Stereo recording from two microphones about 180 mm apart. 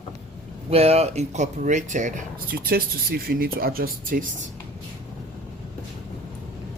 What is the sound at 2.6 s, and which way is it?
Speech, 60° right (ahead or behind).